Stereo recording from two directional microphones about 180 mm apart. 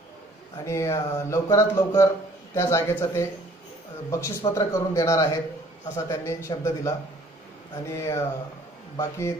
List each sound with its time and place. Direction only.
0.7 s speech: 15° left (ahead or behind)